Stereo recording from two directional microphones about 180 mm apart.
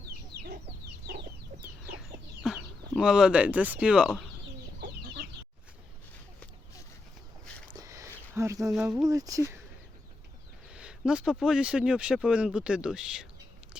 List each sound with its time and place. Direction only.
2.0 s chicken: centre (ahead or behind)
7.7 s a sound: 20° right (ahead or behind)
8.7 s speech: 5° right (ahead or behind)
9.0 s speech: 20° right (ahead or behind)
10.7 s speech: 5° right (ahead or behind)